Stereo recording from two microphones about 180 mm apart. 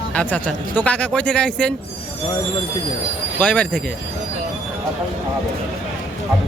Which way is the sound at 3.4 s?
5° left (ahead or behind).